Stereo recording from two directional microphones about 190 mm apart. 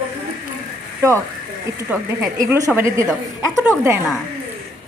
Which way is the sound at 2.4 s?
15° right (ahead or behind).